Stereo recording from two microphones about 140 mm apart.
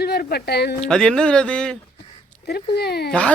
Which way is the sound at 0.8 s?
5° left (ahead or behind).